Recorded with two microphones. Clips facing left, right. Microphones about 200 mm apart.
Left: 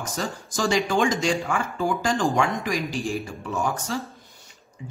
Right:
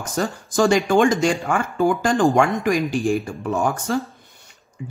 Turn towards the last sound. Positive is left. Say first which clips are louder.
# right 7 dB
turn(degrees=-55)  # may be behind; listen again after turning